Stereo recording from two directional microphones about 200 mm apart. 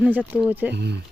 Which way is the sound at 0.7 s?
55° right (ahead or behind).